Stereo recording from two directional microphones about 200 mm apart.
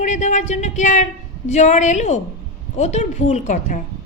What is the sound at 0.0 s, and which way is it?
A woman's voice, 35° left (ahead or behind).